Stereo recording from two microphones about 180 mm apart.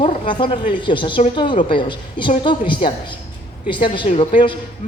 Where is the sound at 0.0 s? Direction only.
30° left (ahead or behind).